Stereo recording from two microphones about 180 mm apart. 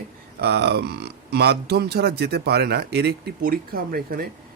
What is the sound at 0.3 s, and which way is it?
Speech, 65° right (ahead or behind).